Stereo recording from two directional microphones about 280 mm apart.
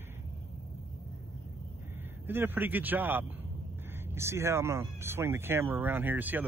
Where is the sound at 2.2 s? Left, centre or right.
Centre.